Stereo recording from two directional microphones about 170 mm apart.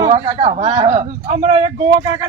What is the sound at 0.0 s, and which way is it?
A man's voice, 30° right (ahead or behind).